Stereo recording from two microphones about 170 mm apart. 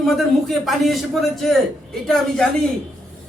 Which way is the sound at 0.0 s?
Centre (ahead or behind).